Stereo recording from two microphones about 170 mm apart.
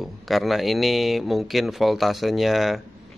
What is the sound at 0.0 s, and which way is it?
A man's voice, centre (ahead or behind).